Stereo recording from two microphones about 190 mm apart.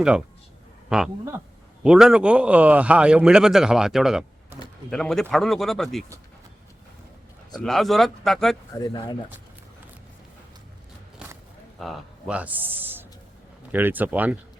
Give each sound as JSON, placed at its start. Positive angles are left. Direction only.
{"t": 0.9, "sound": "a man's voice", "side_deg": -5}
{"t": 7.6, "sound": "a man's voice", "side_deg": 0}
{"t": 8.7, "sound": "speech", "side_deg": 20}
{"t": 11.8, "sound": "speech", "side_deg": -5}